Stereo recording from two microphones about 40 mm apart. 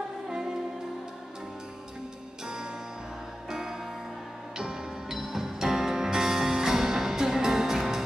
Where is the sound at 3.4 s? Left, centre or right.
Centre.